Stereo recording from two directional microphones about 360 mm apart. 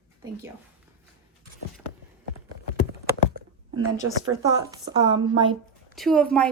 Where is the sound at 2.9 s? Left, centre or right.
Right.